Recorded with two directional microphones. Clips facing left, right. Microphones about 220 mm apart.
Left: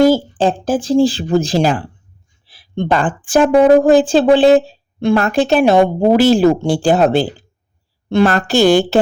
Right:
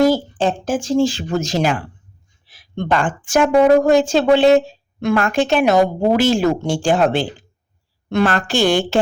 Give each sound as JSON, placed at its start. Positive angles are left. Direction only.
{"t": 0.3, "sound": "speech", "side_deg": 35}
{"t": 2.5, "sound": "a sound", "side_deg": 30}
{"t": 3.2, "sound": "speech", "side_deg": 30}